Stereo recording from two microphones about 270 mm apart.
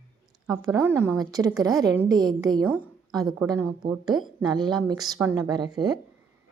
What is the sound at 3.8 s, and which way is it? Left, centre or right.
Speech, centre.